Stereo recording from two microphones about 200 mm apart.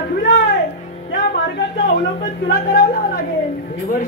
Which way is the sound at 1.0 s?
55° left (ahead or behind).